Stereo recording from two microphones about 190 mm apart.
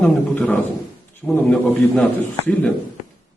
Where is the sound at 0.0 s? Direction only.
5° left (ahead or behind).